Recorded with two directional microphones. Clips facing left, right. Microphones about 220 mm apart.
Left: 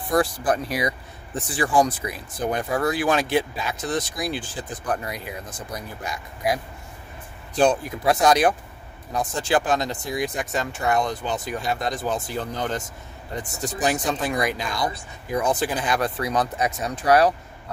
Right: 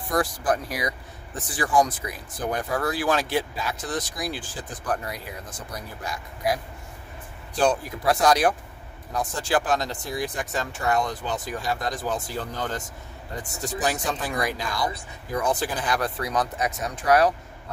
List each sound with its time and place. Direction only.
0.1 s speech: 25° left (ahead or behind)
7.5 s speech: 20° left (ahead or behind)